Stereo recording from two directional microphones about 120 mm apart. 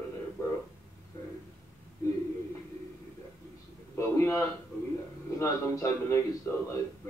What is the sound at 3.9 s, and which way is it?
A man's voice, 25° left (ahead or behind).